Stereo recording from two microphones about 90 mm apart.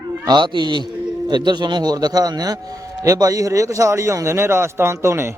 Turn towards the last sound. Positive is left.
turn(degrees=-30)  # may be behind; listen again after turning